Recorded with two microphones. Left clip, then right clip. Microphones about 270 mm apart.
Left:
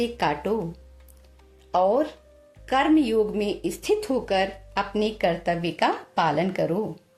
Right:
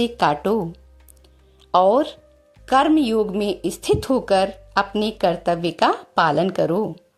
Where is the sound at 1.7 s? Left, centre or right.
Right.